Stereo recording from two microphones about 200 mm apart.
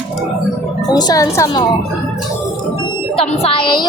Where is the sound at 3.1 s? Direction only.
30° left (ahead or behind).